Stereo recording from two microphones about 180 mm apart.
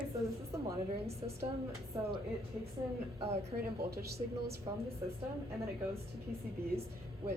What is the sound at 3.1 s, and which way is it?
Speech, 35° right (ahead or behind).